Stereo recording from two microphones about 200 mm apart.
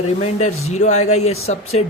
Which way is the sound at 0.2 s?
35° left (ahead or behind).